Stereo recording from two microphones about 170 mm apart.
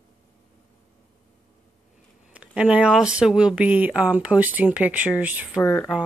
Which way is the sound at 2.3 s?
5° right (ahead or behind).